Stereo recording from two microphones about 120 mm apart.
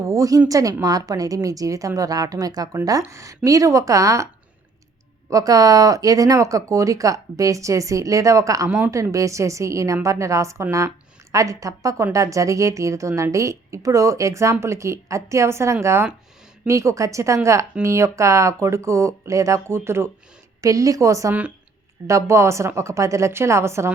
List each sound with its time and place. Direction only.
0.0 s speech: 25° right (ahead or behind)
5.3 s speech: 30° right (ahead or behind)